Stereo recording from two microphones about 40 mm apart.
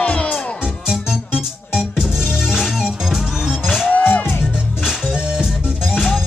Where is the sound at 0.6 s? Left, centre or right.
Centre.